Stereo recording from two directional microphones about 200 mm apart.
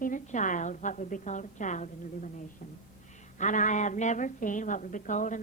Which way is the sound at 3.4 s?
40° left (ahead or behind).